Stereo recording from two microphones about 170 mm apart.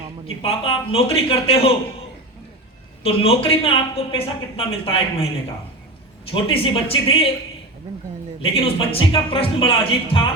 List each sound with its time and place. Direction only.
0.3 s a woman's voice: 35° left (ahead or behind)
3.0 s a woman's voice: 35° left (ahead or behind)
6.3 s a woman's voice: 35° left (ahead or behind)
8.6 s a woman's voice: 35° left (ahead or behind)